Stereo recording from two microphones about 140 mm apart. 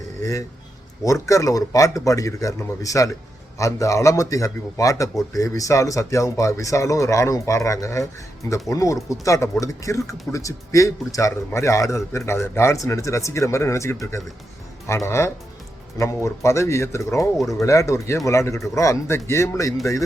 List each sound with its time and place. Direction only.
0.2 s a man's voice: 25° left (ahead or behind)